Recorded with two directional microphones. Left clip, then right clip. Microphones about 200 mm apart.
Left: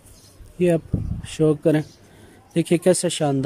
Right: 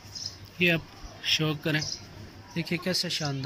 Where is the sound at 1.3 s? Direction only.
40° left (ahead or behind).